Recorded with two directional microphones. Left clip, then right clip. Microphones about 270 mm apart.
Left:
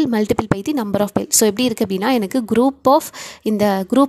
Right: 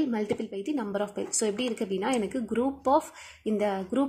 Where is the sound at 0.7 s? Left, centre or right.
Left.